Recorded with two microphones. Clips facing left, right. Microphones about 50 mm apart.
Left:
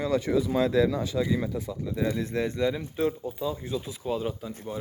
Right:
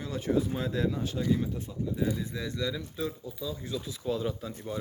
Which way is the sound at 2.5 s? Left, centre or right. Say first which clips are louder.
Left 6 dB; left.